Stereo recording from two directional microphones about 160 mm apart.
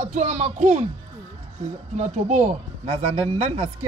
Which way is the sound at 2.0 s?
45° right (ahead or behind).